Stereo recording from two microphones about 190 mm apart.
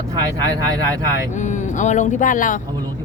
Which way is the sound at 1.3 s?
40° left (ahead or behind).